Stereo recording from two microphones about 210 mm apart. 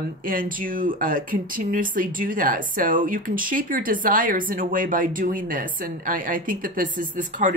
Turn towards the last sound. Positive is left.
turn(degrees=-40)  # may be behind; listen again after turning